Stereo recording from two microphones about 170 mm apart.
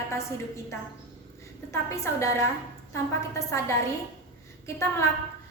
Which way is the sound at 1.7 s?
15° left (ahead or behind).